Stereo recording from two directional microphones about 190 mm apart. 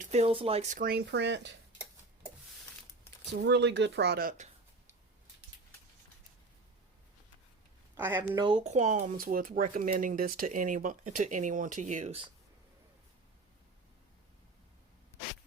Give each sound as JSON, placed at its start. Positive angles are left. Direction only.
{"t": 0.0, "sound": "speech", "side_deg": -35}
{"t": 3.4, "sound": "speech", "side_deg": -65}
{"t": 7.9, "sound": "speech", "side_deg": -10}
{"t": 8.4, "sound": "speech", "side_deg": -30}